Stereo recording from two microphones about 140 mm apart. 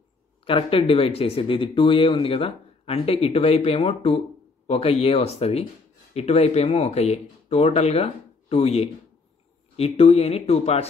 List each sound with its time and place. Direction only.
0.5 s speech: 40° left (ahead or behind)